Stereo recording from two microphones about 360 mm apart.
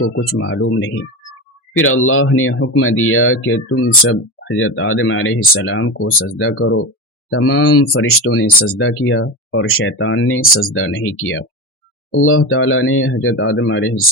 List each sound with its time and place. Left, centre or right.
0.3 s speech: left